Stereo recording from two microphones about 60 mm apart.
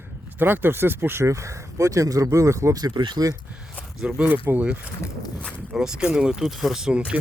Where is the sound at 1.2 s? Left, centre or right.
Right.